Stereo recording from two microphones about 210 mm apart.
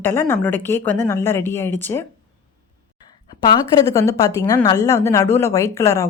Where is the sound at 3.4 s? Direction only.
20° left (ahead or behind).